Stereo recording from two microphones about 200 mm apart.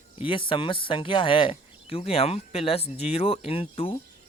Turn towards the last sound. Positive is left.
turn(degrees=30)  # may be behind; listen again after turning